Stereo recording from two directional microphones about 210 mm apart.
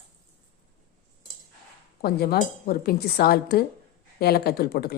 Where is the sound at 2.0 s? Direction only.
45° left (ahead or behind).